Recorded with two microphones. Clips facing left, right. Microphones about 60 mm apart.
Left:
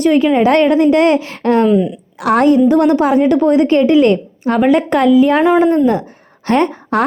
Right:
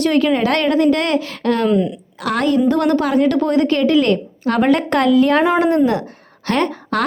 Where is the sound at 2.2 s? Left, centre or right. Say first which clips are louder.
Left 6 dB; left.